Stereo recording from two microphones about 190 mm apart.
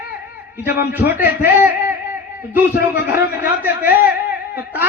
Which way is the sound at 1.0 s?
55° left (ahead or behind).